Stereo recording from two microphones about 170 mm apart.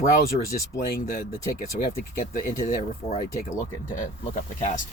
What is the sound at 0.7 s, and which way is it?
Speech, 70° left (ahead or behind).